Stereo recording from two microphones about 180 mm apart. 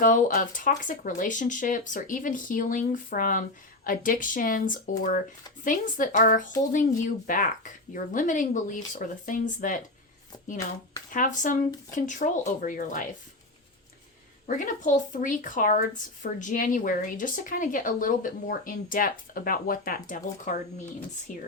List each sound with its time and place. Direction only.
0.0 s a woman's voice: 45° left (ahead or behind)
11.1 s a woman's voice: 45° left (ahead or behind)
14.4 s a woman's voice: 45° left (ahead or behind)